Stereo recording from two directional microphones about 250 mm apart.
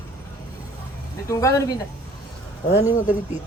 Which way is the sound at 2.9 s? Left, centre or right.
Left.